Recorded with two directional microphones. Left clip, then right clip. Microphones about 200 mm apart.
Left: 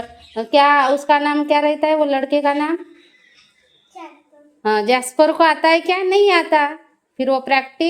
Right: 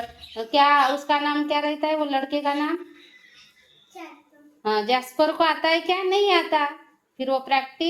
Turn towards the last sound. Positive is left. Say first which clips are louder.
# left 6 dB
turn(degrees=55)  # may be behind; listen again after turning